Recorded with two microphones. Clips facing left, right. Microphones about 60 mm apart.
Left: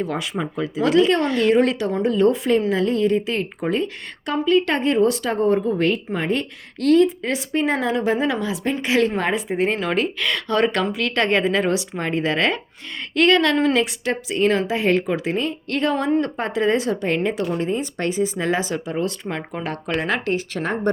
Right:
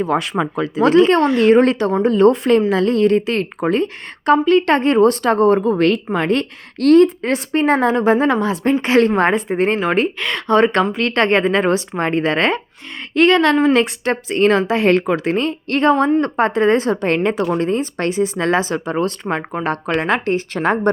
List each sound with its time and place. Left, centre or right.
0.0 s a woman's voice: right
0.3 s speech: right
0.9 s a woman's voice: right
1.2 s speech: right
1.5 s a woman's voice: right
9.7 s a woman's voice: right
13.1 s speech: right
13.7 s a woman's voice: right